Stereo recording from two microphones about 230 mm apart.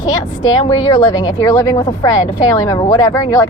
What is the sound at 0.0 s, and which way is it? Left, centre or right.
A woman's voice, centre.